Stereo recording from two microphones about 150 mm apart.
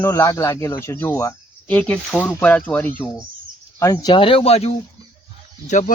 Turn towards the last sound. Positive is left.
turn(degrees=55)  # may be behind; listen again after turning